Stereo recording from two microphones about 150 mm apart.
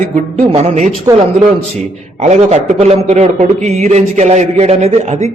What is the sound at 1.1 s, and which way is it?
Speech, 20° right (ahead or behind).